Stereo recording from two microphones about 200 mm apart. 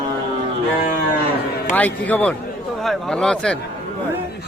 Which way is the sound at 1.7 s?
10° left (ahead or behind).